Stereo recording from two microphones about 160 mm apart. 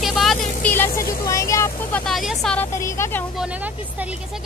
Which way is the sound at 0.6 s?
15° left (ahead or behind).